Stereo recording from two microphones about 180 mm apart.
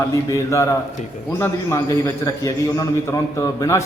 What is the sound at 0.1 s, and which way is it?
A man's voice, 15° left (ahead or behind).